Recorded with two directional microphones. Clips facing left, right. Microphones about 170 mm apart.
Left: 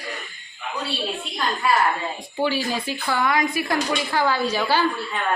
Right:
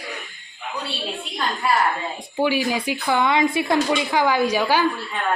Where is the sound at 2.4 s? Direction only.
15° right (ahead or behind).